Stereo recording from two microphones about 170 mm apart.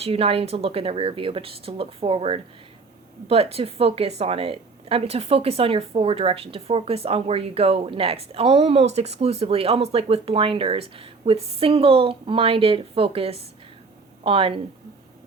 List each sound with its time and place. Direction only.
0.0 s a woman's voice: 35° right (ahead or behind)